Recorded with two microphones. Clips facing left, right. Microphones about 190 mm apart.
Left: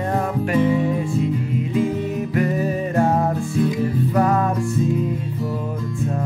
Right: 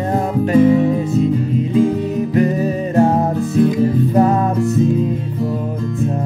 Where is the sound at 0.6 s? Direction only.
40° right (ahead or behind).